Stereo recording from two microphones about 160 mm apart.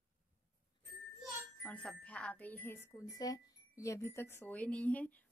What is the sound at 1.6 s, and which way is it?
Speech, 10° left (ahead or behind).